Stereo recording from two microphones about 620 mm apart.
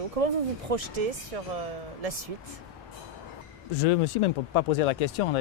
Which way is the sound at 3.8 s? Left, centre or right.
Left.